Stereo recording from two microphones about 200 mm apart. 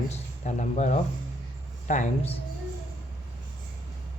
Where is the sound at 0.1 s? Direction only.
35° left (ahead or behind).